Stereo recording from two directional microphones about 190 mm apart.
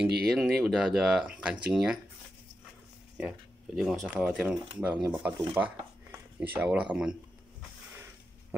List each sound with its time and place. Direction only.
0.0 s a sound: 60° right (ahead or behind)
0.3 s speech: centre (ahead or behind)
3.2 s speech: 5° right (ahead or behind)